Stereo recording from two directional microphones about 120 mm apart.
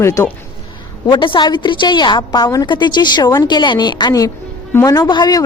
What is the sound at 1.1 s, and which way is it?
A woman's voice, 40° left (ahead or behind).